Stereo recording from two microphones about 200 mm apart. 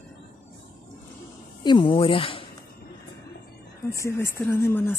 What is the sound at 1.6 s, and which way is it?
Speech, 25° left (ahead or behind).